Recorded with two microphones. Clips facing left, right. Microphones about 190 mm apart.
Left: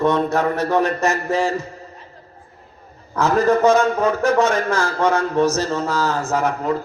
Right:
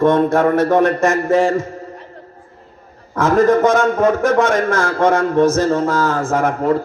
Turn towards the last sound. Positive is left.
turn(degrees=-50)  # may be behind; listen again after turning